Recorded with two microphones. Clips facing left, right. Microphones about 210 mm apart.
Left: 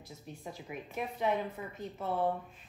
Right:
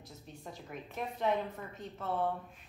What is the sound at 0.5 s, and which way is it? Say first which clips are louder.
A woman's voice: left 2 dB; 5° left (ahead or behind).